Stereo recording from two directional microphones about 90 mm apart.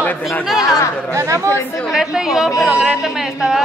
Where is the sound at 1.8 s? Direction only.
5° right (ahead or behind).